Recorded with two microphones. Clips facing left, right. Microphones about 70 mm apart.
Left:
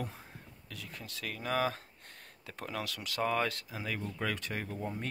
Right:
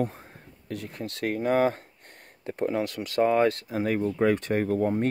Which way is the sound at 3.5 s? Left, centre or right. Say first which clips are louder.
Right 12 dB; right.